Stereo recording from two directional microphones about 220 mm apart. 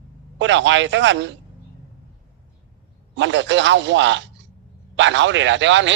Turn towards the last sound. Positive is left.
turn(degrees=-55)  # may be behind; listen again after turning